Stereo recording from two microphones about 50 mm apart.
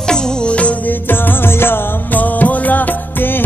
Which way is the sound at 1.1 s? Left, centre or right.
Left.